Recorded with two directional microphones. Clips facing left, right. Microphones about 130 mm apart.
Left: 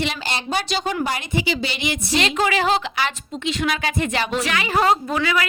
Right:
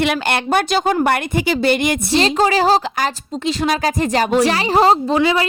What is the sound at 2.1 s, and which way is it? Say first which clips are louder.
Speech: right 5 dB; 35° right (ahead or behind).